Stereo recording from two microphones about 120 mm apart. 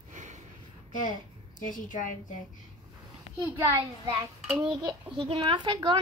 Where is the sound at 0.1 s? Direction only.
90° right.